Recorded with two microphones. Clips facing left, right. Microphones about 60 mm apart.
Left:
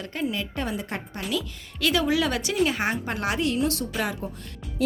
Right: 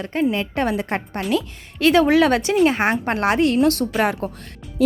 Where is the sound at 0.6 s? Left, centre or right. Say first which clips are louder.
Right 8 dB; right.